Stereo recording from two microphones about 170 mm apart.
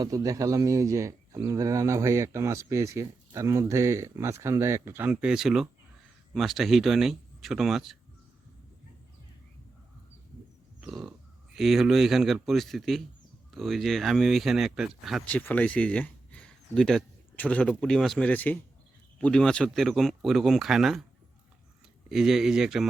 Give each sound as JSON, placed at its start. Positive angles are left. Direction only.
{"t": 0.0, "sound": "speech", "side_deg": -20}
{"t": 10.8, "sound": "grunt", "side_deg": -5}
{"t": 11.5, "sound": "speech", "side_deg": 0}
{"t": 15.3, "sound": "speech", "side_deg": 10}
{"t": 22.1, "sound": "speech", "side_deg": 0}